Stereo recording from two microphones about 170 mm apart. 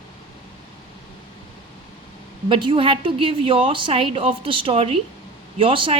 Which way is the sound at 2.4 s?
30° right (ahead or behind).